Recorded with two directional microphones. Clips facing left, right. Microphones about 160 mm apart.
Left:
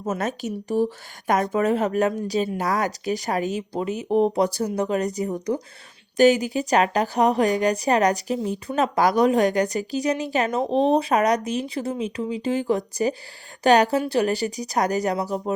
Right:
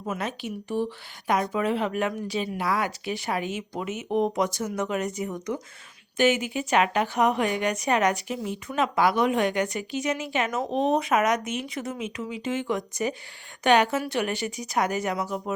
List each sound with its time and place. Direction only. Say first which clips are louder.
0.0 s a woman's voice: left 5 dB; 45° left (ahead or behind)